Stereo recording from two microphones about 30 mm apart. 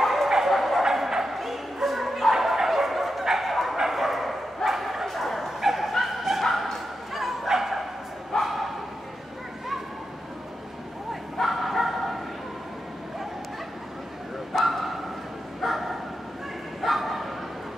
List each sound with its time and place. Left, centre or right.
0.0 s bow-wow: centre
0.5 s a sound: centre
0.8 s bow-wow: centre
11.4 s bow-wow: centre
14.5 s bow-wow: centre